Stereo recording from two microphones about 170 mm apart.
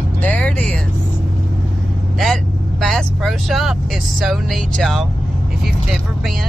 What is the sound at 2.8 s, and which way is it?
Vehicle, centre (ahead or behind).